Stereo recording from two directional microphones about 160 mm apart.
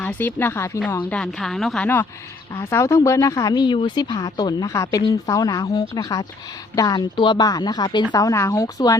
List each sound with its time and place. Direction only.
0.0 s a woman's voice: 10° left (ahead or behind)